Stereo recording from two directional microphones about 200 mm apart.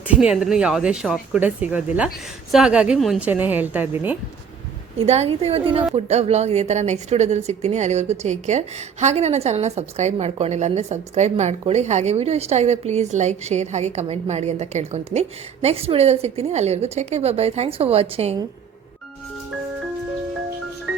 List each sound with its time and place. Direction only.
0.1 s a woman's voice: 5° right (ahead or behind)
4.9 s a woman's voice: 30° right (ahead or behind)